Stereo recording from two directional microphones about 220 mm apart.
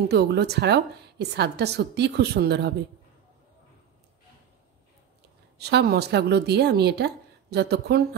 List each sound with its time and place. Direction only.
0.1 s a woman's voice: 50° right (ahead or behind)
5.6 s a woman's voice: 50° right (ahead or behind)